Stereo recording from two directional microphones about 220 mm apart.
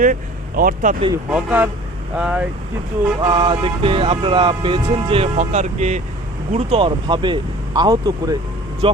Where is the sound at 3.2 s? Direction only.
20° right (ahead or behind).